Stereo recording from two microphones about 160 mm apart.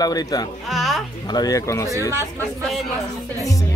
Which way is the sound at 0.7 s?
Centre (ahead or behind).